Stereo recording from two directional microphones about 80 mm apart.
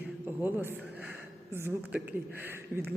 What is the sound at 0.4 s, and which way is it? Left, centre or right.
Speech, right.